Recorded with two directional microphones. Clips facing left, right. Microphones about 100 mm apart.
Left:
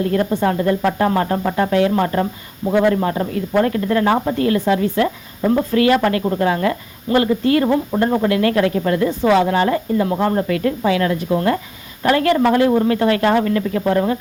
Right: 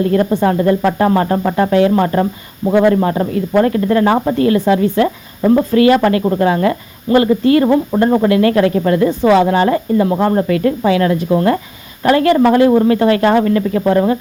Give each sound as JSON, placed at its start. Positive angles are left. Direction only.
{"t": 0.0, "sound": "speech", "side_deg": -35}
{"t": 9.0, "sound": "speech", "side_deg": -20}